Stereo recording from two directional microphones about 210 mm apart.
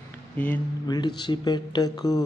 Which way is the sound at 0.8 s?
20° left (ahead or behind).